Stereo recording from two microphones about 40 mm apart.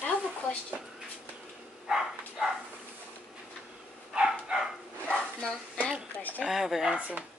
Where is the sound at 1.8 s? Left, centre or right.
Centre.